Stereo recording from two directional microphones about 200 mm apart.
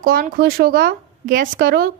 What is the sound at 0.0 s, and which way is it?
A woman's voice, 45° right (ahead or behind).